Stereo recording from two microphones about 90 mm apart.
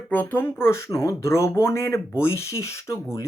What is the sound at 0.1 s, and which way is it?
Speech, 20° left (ahead or behind).